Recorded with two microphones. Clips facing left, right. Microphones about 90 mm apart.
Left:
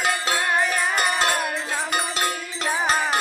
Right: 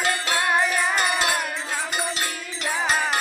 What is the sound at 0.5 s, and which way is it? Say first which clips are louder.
Music: right 1 dB; centre (ahead or behind).